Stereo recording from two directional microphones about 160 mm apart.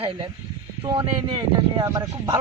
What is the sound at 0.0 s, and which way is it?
A man's voice, 35° right (ahead or behind).